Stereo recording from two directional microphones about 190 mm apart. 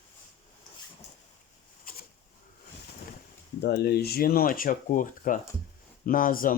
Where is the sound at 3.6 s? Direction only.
60° left (ahead or behind).